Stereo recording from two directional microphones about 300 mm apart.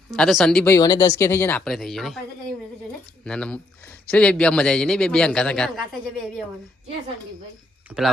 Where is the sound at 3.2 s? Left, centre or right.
Centre.